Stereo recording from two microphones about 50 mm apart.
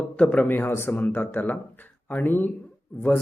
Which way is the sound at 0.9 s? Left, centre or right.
Left.